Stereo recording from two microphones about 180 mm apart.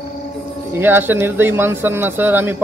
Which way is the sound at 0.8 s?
10° right (ahead or behind).